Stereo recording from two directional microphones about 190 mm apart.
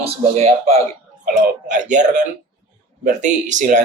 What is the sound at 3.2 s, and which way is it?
Speech, 40° right (ahead or behind).